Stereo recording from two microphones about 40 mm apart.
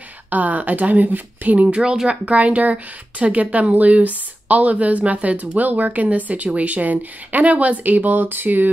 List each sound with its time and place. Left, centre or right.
0.3 s a woman's voice: right